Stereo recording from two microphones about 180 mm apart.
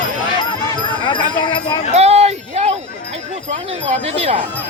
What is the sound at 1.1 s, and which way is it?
Speech, 25° left (ahead or behind).